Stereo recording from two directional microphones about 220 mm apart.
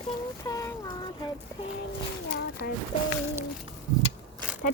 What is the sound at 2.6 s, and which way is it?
Speech, 50° left (ahead or behind).